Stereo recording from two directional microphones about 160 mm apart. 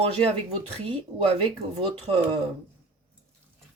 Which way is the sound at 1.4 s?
35° right (ahead or behind).